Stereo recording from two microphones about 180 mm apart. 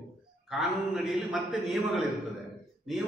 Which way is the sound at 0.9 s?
Centre (ahead or behind).